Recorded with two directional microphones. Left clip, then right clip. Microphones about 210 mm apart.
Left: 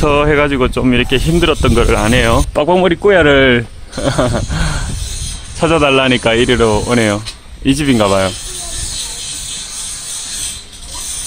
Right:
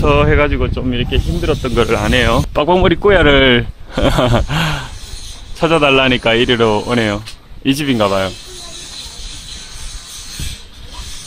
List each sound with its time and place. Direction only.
0.0 s speech: centre (ahead or behind)
0.6 s speech: 10° left (ahead or behind)
1.4 s speech: 25° left (ahead or behind)
1.8 s speech: 5° left (ahead or behind)
5.6 s speech: 5° left (ahead or behind)